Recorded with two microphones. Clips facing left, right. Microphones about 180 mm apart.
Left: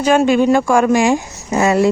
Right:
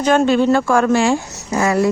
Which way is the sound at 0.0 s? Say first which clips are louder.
Left 1 dB; 10° left (ahead or behind).